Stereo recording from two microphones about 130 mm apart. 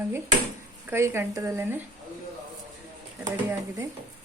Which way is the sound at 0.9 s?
20° right (ahead or behind).